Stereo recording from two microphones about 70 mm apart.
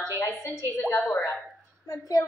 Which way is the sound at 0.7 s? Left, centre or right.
Left.